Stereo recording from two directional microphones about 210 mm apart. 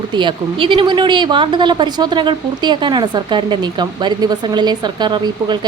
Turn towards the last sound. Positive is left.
turn(degrees=-20)  # may be behind; listen again after turning